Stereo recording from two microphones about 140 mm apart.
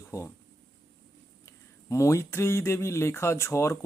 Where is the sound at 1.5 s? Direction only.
20° left (ahead or behind).